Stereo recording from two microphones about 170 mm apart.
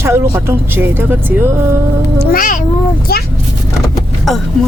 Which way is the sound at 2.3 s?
55° left (ahead or behind).